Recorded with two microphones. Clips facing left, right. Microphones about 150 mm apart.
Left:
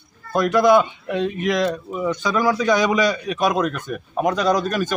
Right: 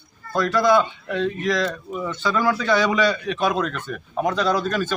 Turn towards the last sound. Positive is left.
turn(degrees=15)  # may be behind; listen again after turning